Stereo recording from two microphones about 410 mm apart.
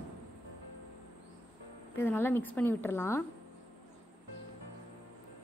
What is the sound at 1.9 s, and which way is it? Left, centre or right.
A woman's voice, centre.